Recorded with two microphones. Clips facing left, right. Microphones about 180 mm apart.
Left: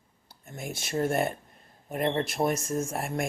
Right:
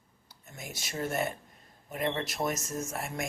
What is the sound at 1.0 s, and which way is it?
Speech, 50° left (ahead or behind).